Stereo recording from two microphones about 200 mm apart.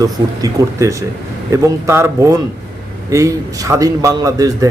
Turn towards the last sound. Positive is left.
turn(degrees=-20)  # may be behind; listen again after turning